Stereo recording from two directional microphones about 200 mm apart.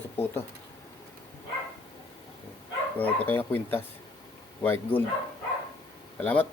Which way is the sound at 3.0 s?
10° left (ahead or behind).